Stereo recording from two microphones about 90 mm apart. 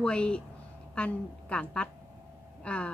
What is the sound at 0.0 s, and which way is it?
A woman's voice, 10° left (ahead or behind).